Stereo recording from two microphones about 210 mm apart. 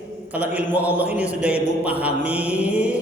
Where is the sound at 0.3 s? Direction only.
10° right (ahead or behind).